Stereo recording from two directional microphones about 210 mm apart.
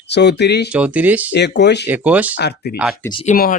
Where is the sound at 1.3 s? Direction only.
55° left (ahead or behind).